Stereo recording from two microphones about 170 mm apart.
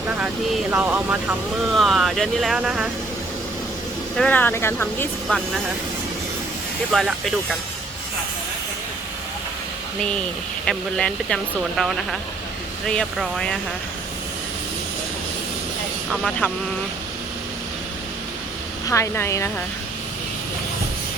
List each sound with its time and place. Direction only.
0.7 s speech: 5° right (ahead or behind)
4.2 s speech: 10° left (ahead or behind)
6.9 s speech: centre (ahead or behind)
10.7 s speech: 5° left (ahead or behind)
18.9 s speech: 15° left (ahead or behind)